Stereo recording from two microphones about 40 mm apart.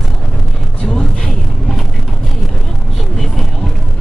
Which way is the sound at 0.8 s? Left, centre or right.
Centre.